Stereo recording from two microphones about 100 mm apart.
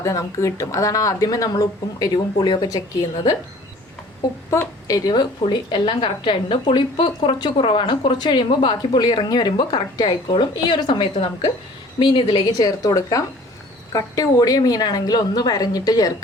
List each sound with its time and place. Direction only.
0.0 s speech: 30° left (ahead or behind)
4.5 s a woman's voice: 30° left (ahead or behind); by 12.4 s 55° left (ahead or behind)
12.5 s speech: 40° left (ahead or behind)